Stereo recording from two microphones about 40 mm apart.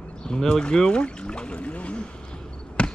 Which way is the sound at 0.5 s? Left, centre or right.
Centre.